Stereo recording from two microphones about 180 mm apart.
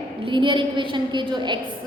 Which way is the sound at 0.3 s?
30° right (ahead or behind).